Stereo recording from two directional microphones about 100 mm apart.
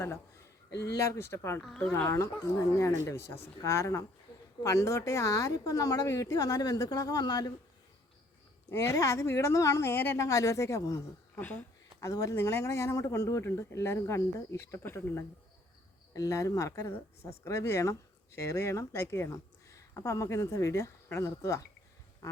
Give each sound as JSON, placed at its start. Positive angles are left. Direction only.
{"t": 0.8, "sound": "speech", "side_deg": 30}
{"t": 1.6, "sound": "speech", "side_deg": 5}
{"t": 2.0, "sound": "speech", "side_deg": 30}
{"t": 8.7, "sound": "speech", "side_deg": 30}
{"t": 10.2, "sound": "speech", "side_deg": 35}
{"t": 11.3, "sound": "speech", "side_deg": 15}
{"t": 11.9, "sound": "speech", "side_deg": 35}
{"t": 22.2, "sound": "duck", "side_deg": 35}